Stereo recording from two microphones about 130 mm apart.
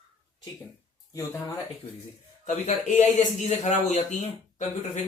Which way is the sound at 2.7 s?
65° left (ahead or behind).